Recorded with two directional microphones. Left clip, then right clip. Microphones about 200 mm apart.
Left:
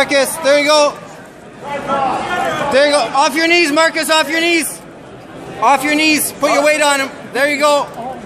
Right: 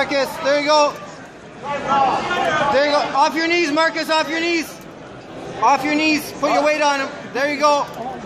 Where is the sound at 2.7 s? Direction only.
55° left (ahead or behind).